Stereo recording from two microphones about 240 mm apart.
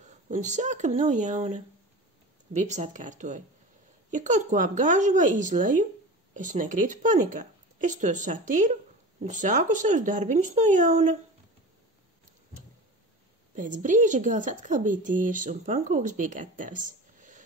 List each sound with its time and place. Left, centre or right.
0.0 s speech: right
2.6 s a woman's voice: right
13.6 s a woman's voice: right